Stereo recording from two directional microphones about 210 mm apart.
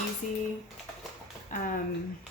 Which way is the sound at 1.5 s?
40° left (ahead or behind).